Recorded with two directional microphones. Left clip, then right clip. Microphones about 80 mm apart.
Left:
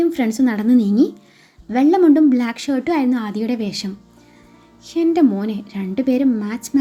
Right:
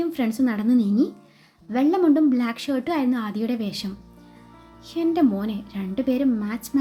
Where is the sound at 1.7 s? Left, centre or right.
Left.